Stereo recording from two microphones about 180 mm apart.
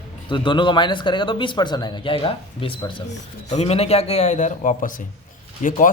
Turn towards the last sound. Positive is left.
turn(degrees=45)  # may be behind; listen again after turning